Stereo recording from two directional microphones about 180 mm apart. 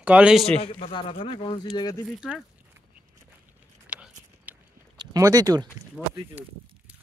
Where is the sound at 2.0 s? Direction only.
5° right (ahead or behind).